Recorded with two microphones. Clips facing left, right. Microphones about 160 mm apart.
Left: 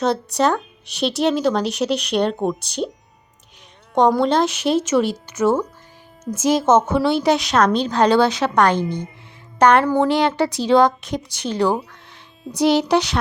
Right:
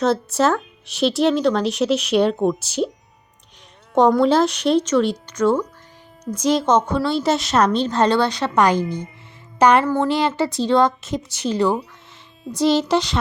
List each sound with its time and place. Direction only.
0.0 s speech: centre (ahead or behind)
3.9 s a woman's voice: 5° right (ahead or behind)
8.8 s a woman's voice: 30° left (ahead or behind)
9.6 s speech: 5° right (ahead or behind)